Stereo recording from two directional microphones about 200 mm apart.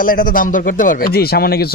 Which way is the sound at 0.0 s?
45° left (ahead or behind).